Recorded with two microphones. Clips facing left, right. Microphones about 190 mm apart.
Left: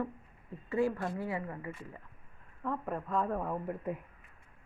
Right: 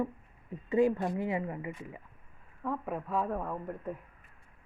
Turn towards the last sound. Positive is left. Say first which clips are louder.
# left 2 dB
turn(degrees=10)  # may be behind; listen again after turning